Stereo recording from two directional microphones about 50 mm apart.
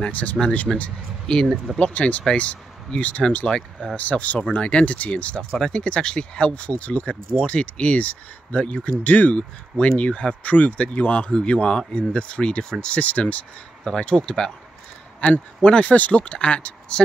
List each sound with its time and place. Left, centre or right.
0.1 s speech: left
1.2 s speech: centre
1.8 s speech: left
13.8 s speech: centre
15.1 s speech: left